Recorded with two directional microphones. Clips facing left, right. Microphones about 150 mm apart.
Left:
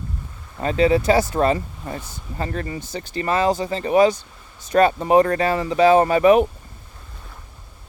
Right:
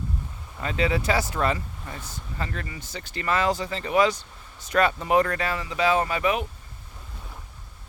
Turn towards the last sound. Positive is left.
turn(degrees=45)  # may be behind; listen again after turning